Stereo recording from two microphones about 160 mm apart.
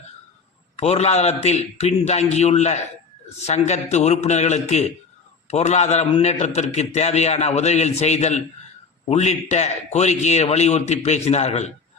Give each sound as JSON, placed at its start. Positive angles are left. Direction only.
{"t": 0.8, "sound": "a man's voice", "side_deg": 40}